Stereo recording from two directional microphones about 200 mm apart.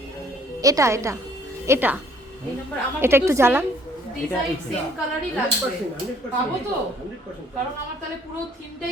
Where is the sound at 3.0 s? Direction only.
10° right (ahead or behind).